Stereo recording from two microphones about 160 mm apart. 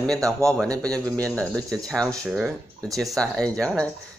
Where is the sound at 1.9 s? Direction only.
5° left (ahead or behind).